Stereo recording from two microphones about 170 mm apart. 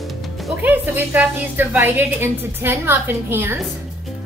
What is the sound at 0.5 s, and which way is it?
A woman's voice, 10° right (ahead or behind).